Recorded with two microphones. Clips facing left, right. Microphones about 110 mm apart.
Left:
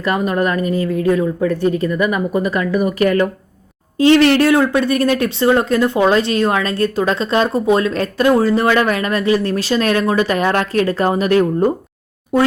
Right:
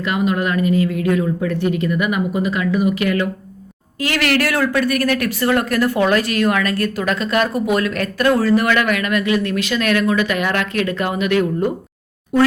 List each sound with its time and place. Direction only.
0.0 s speech: 40° left (ahead or behind)
4.0 s speech: 25° left (ahead or behind)